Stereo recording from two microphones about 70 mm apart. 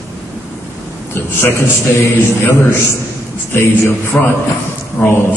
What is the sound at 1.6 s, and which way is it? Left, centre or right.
A man's voice, left.